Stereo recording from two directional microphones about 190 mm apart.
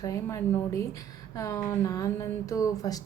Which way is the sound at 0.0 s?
15° left (ahead or behind).